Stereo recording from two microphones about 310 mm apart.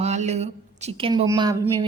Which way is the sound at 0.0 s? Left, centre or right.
Right.